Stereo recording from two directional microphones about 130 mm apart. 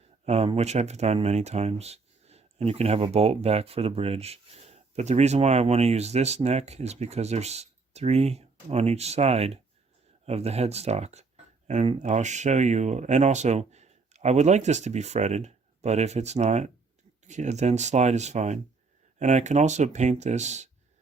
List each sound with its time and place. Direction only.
0.3 s speech: 55° right (ahead or behind)